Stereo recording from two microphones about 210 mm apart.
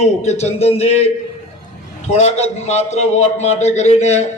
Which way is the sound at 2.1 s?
30° left (ahead or behind).